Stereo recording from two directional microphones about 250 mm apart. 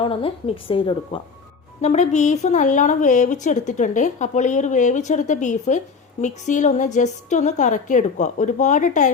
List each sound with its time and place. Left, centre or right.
0.0 s a woman's voice: left